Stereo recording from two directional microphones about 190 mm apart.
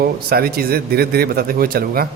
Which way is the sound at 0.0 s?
55° right (ahead or behind).